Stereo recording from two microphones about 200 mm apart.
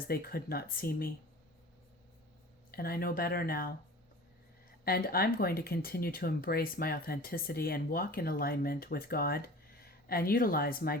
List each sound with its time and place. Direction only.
0.1 s speech: 50° left (ahead or behind)
2.7 s speech: 50° left (ahead or behind)
4.9 s speech: 50° left (ahead or behind)